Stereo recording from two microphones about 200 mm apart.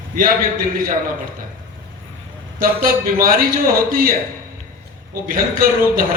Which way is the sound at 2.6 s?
45° right (ahead or behind).